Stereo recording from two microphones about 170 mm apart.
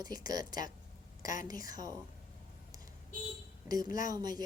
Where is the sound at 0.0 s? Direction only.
25° right (ahead or behind).